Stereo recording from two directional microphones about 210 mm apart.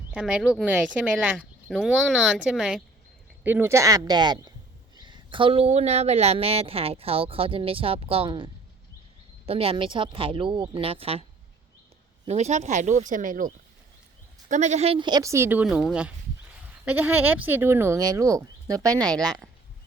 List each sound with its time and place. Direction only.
0.1 s a woman's voice: 5° right (ahead or behind); by 8.4 s 25° right (ahead or behind)
9.5 s a woman's voice: 25° right (ahead or behind)